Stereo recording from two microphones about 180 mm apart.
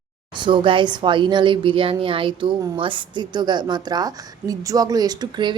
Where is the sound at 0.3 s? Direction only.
25° right (ahead or behind).